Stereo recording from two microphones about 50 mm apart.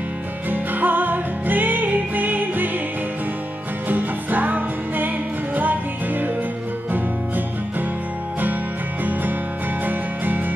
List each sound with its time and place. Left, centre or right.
0.5 s music: right
3.9 s music: right
9.8 s music: right